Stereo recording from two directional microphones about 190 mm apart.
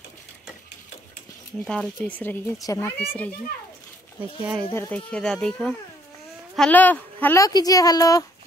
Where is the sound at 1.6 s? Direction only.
Centre (ahead or behind); by 2.9 s 15° left (ahead or behind).